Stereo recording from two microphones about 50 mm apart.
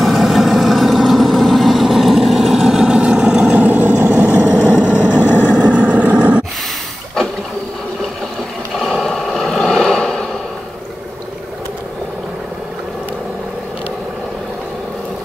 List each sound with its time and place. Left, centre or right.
0.0 s vehicle: centre
3.6 s vehicle: right
4.5 s vehicle: centre
5.1 s vehicle: left
5.5 s vehicle: right
9.0 s vehicle: centre